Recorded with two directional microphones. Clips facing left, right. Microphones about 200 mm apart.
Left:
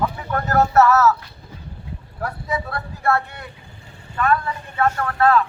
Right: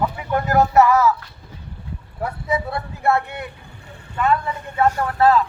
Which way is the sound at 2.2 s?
20° right (ahead or behind).